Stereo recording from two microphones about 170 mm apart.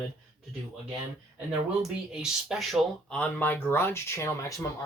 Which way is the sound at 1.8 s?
5° right (ahead or behind).